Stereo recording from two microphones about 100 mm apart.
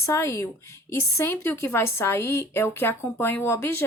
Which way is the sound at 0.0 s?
30° left (ahead or behind).